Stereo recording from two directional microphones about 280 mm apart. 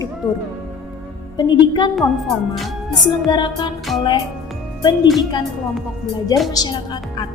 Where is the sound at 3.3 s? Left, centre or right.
Centre.